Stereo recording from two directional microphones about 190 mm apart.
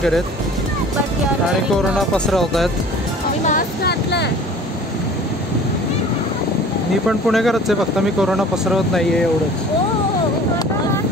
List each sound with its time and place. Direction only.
2.0 s speech: 5° left (ahead or behind)
3.4 s speech: 50° left (ahead or behind)
7.1 s speech: centre (ahead or behind)